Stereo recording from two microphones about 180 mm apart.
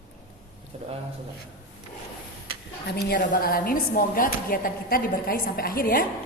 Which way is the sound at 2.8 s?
65° left (ahead or behind).